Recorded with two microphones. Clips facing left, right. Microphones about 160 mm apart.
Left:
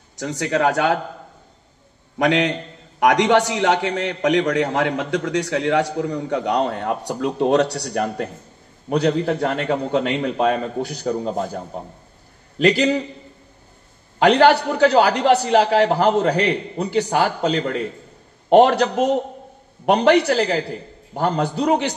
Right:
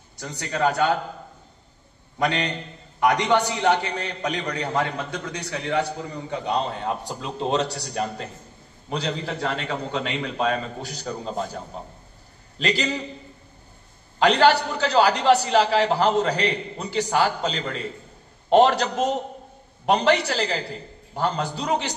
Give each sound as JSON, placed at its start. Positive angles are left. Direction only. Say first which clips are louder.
{"t": 0.1, "sound": "speech", "louder": "left 9 dB", "side_deg": 90}
{"t": 2.1, "sound": "a man's voice", "louder": "left 6 dB", "side_deg": 90}
{"t": 14.2, "sound": "a man's voice", "louder": "left 4 dB", "side_deg": 55}